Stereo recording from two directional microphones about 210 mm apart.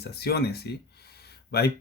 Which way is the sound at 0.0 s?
50° left (ahead or behind).